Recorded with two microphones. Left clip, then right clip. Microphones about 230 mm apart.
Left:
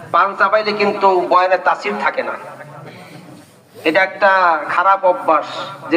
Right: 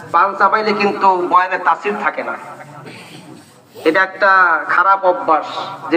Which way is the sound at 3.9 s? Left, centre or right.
Left.